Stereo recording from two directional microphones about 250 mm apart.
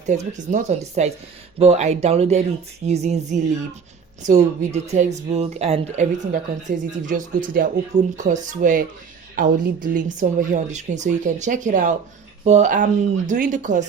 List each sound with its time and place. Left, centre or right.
0.1 s speech: right